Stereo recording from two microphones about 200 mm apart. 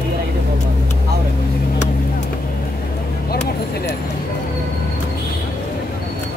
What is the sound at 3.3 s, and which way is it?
Speech, 55° left (ahead or behind).